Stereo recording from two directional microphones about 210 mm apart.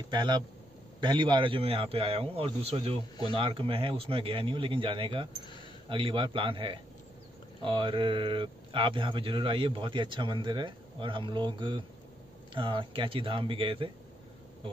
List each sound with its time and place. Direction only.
0.1 s a man's voice: 20° right (ahead or behind)